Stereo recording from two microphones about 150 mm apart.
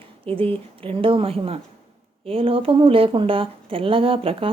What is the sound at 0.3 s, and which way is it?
Speech, 40° right (ahead or behind).